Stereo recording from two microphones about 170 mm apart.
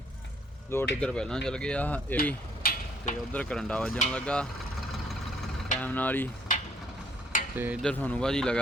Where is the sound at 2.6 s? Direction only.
60° left (ahead or behind).